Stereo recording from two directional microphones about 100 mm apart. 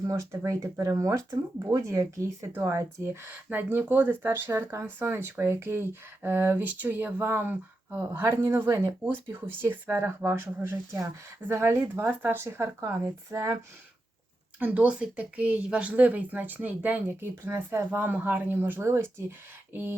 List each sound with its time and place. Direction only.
0.1 s speech: 30° right (ahead or behind)
14.6 s a woman's voice: 15° right (ahead or behind)